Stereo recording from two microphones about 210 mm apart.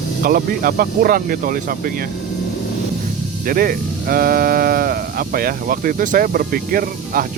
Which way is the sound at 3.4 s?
45° right (ahead or behind).